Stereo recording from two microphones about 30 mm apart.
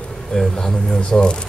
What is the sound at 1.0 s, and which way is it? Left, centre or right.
Speech, left.